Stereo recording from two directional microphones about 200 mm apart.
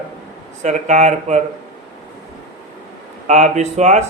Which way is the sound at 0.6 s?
35° right (ahead or behind).